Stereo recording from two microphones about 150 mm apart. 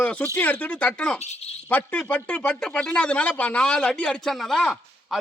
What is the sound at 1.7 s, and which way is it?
Speech, 10° left (ahead or behind).